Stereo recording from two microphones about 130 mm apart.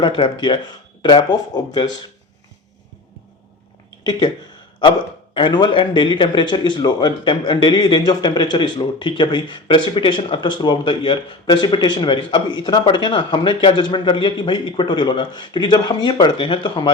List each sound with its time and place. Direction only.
0.0 s a man's voice: 40° left (ahead or behind)
4.8 s a man's voice: 40° left (ahead or behind)